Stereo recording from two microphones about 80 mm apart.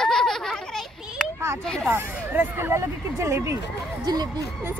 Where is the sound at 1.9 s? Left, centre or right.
Right.